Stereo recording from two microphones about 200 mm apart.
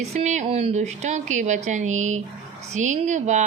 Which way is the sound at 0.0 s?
35° right (ahead or behind).